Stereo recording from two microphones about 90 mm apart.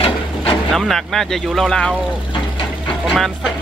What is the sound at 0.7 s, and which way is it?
Speech, centre (ahead or behind).